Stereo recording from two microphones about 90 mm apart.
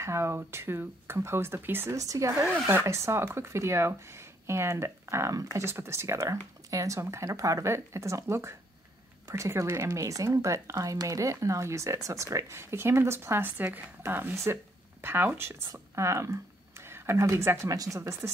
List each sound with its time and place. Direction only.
0.0 s speech: 30° right (ahead or behind)
2.0 s speech: 35° right (ahead or behind)
2.4 s speech: 20° right (ahead or behind); by 18.1 s 35° right (ahead or behind)